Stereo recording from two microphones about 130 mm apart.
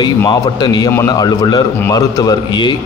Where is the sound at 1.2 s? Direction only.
30° left (ahead or behind).